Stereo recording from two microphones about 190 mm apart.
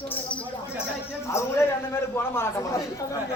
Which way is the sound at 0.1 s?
5° left (ahead or behind).